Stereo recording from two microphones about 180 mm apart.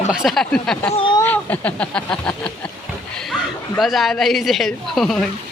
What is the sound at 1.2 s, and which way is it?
A woman's voice, 10° left (ahead or behind).